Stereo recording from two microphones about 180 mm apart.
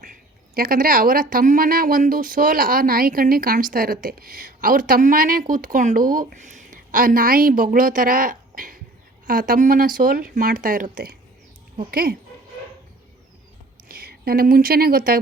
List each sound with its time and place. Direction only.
0.0 s speech: 50° right (ahead or behind)
13.8 s speech: 55° right (ahead or behind)